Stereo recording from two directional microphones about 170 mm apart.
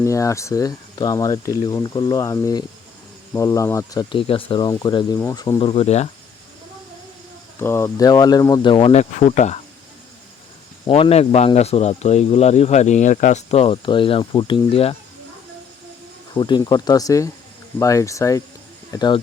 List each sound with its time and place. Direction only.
0.0 s speech: 20° left (ahead or behind)
4.1 s speech: 30° left (ahead or behind)
7.6 s speech: 15° left (ahead or behind); by 9.6 s 45° left (ahead or behind)
10.8 s speech: 35° left (ahead or behind)
16.3 s speech: 25° left (ahead or behind)